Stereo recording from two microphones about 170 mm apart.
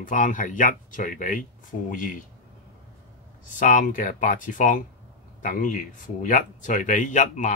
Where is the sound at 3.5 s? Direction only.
50° left (ahead or behind).